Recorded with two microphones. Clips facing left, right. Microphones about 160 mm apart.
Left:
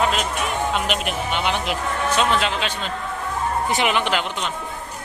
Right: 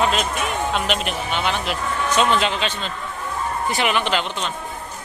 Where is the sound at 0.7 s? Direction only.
10° left (ahead or behind).